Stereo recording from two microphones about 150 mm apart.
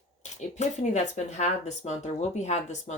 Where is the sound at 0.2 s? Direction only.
50° left (ahead or behind).